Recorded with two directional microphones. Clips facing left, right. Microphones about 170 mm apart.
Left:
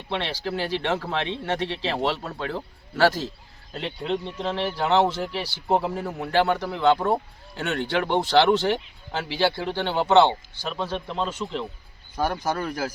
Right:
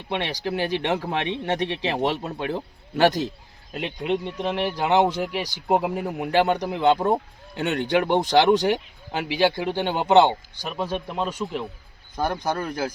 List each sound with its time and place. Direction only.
0.1 s speech: 15° right (ahead or behind)
12.1 s speech: 5° left (ahead or behind)